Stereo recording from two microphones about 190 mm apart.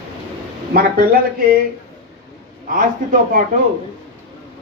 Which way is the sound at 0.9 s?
45° right (ahead or behind).